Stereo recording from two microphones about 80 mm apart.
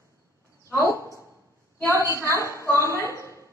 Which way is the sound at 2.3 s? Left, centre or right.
Left.